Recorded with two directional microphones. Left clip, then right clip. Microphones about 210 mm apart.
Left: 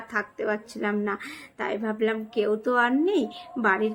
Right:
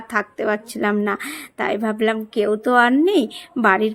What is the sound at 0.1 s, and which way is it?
A woman's voice, 45° right (ahead or behind).